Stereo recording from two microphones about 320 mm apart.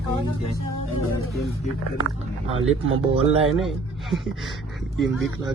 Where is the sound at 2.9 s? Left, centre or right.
Centre.